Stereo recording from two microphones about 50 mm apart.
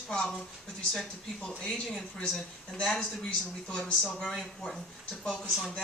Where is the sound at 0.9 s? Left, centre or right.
Centre.